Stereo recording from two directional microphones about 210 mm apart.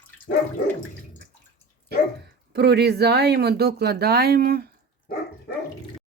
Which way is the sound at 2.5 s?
50° right (ahead or behind).